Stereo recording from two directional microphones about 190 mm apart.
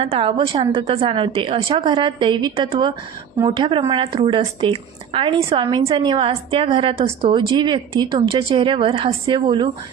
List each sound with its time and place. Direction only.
0.0 s a woman's voice: 30° right (ahead or behind)